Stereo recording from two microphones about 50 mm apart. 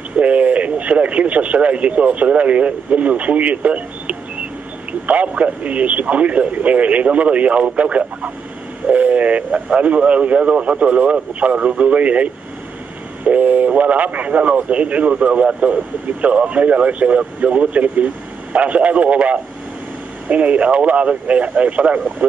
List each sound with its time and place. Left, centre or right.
0.1 s speech: right